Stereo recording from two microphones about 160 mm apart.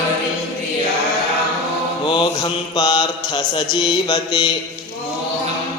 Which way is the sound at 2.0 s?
30° left (ahead or behind).